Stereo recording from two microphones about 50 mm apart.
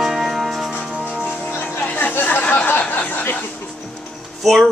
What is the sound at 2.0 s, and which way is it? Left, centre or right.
Chatter, left.